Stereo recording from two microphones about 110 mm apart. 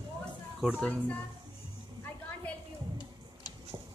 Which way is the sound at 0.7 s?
10° left (ahead or behind).